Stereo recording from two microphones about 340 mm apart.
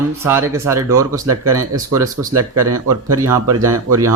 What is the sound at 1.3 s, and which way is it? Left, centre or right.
Speech, right.